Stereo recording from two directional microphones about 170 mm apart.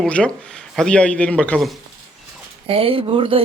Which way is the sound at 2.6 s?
35° right (ahead or behind).